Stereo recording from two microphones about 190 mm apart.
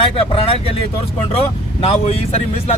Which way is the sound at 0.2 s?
30° left (ahead or behind).